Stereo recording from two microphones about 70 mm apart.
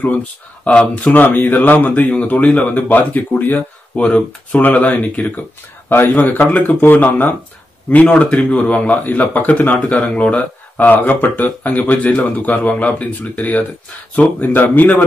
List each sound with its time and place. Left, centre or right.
0.7 s speech: centre